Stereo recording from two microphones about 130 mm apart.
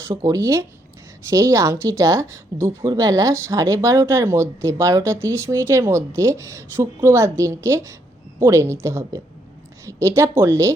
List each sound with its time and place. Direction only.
0.0 s a woman's voice: 25° right (ahead or behind)